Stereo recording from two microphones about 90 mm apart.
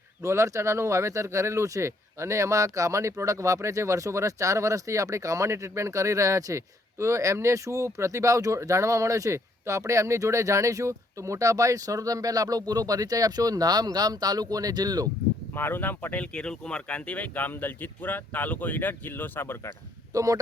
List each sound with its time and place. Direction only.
0.2 s speech: 35° right (ahead or behind)
15.5 s speech: 25° left (ahead or behind)
20.1 s speech: 40° right (ahead or behind)